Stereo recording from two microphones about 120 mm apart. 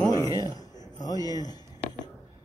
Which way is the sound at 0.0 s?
30° left (ahead or behind).